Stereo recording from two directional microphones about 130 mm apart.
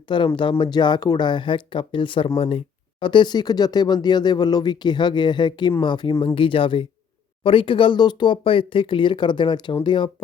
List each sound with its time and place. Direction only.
0.1 s speech: 40° left (ahead or behind)